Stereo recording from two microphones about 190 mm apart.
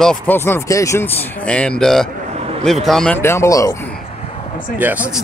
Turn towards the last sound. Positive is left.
turn(degrees=-10)  # may be behind; listen again after turning